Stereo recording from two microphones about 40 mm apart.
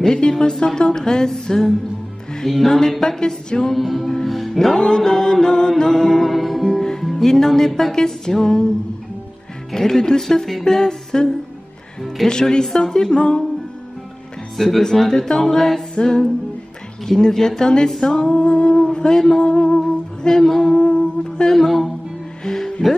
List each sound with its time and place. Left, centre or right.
0.0 s music: centre
3.7 s speech: centre
4.7 s music: centre
6.3 s music: centre
9.7 s music: centre
14.6 s music: centre
21.5 s speech: centre